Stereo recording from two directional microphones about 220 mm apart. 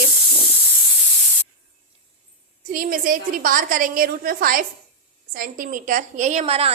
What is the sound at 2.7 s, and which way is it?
A woman's voice, 40° right (ahead or behind).